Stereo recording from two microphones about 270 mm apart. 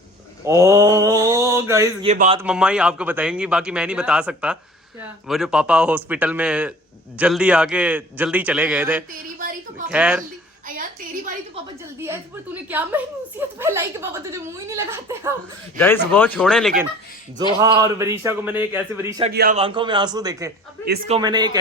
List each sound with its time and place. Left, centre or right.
0.4 s mantra: centre
2.0 s speech: right
2.4 s speech: centre
12.0 s a woman's voice: centre
15.8 s speech: centre
17.6 s a woman's voice: centre
19.3 s a man's voice: right
19.5 s a woman's voice: centre